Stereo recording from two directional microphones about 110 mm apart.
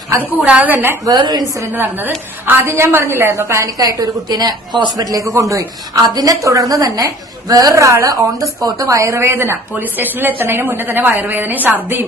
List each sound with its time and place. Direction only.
0.4 s a woman's voice: 15° right (ahead or behind)
1.0 s a woman's voice: 35° right (ahead or behind)
1.7 s a woman's voice: 15° right (ahead or behind)